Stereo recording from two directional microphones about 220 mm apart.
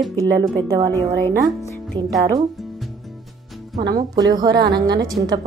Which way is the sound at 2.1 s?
15° right (ahead or behind).